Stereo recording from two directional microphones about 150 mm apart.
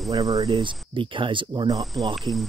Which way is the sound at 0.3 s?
40° right (ahead or behind).